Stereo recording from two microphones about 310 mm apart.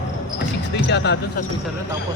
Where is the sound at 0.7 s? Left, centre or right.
Left.